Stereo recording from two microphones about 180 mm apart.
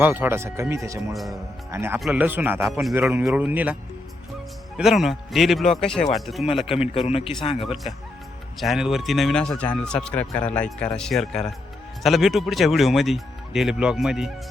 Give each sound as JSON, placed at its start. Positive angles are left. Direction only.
{"t": 0.0, "sound": "speech", "side_deg": -10}
{"t": 1.1, "sound": "speech", "side_deg": 0}
{"t": 1.7, "sound": "speech", "side_deg": -15}
{"t": 4.8, "sound": "speech", "side_deg": 0}
{"t": 6.9, "sound": "speech", "side_deg": 35}
{"t": 8.5, "sound": "speech", "side_deg": 0}